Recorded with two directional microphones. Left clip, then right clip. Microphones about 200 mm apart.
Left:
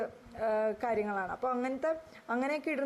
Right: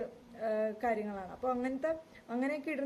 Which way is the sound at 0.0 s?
Centre (ahead or behind).